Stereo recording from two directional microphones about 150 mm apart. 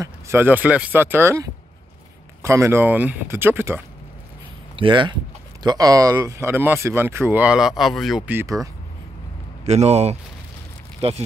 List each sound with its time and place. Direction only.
0.0 s speech: 15° right (ahead or behind)
4.7 s speech: 35° right (ahead or behind); by 8.2 s centre (ahead or behind)
8.3 s speech: 15° right (ahead or behind)
9.7 s speech: 45° right (ahead or behind)